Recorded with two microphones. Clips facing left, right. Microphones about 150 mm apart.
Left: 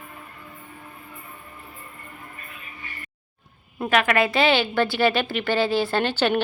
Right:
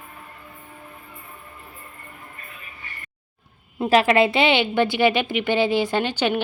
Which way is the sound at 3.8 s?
30° right (ahead or behind).